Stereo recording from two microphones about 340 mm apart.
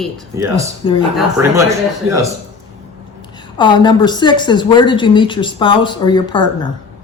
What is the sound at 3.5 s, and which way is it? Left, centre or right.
A woman's voice, centre.